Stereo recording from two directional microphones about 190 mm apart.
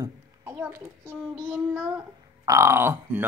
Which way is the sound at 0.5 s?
10° right (ahead or behind).